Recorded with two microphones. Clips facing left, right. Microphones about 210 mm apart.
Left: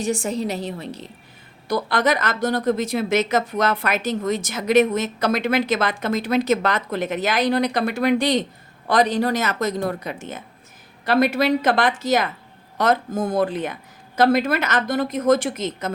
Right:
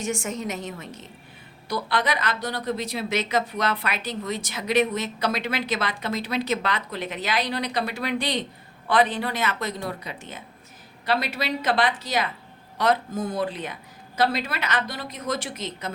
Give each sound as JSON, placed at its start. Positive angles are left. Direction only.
{"t": 0.0, "sound": "a woman's voice", "side_deg": 35}
{"t": 1.6, "sound": "a woman's voice", "side_deg": 45}